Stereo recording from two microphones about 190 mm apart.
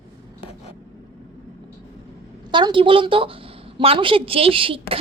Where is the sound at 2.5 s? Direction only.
25° right (ahead or behind).